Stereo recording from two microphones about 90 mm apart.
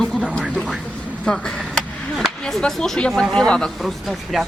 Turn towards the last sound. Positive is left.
turn(degrees=0)  # may be behind; listen again after turning